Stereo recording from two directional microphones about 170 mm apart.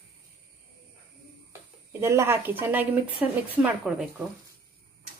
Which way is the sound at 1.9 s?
15° right (ahead or behind).